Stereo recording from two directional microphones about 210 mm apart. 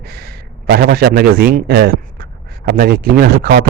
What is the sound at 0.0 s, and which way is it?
A man's voice, 45° right (ahead or behind).